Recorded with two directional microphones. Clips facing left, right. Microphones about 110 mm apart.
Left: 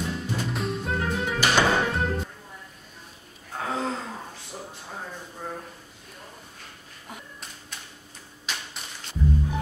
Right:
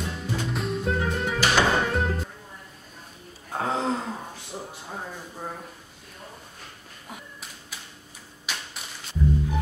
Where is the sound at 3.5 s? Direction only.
30° right (ahead or behind).